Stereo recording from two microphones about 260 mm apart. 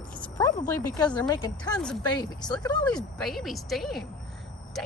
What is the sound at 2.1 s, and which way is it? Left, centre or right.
Speech, centre.